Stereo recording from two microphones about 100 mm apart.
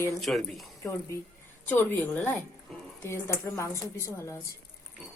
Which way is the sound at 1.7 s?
15° left (ahead or behind).